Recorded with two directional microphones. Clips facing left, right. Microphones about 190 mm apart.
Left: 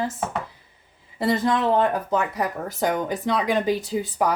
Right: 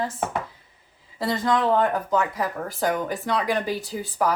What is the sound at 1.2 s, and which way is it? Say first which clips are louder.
Speech: left 1 dB; 25° left (ahead or behind).